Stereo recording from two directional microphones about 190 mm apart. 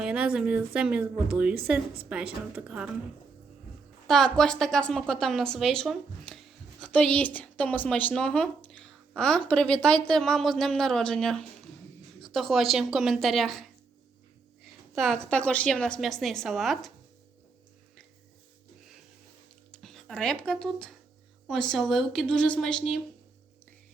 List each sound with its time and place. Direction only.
0.0 s a woman's voice: 5° right (ahead or behind)
4.0 s a woman's voice: centre (ahead or behind)
19.7 s a woman's voice: centre (ahead or behind)